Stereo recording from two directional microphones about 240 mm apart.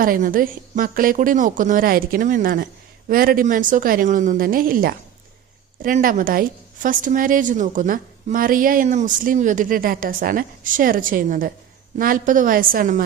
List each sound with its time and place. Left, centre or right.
0.0 s a woman's voice: right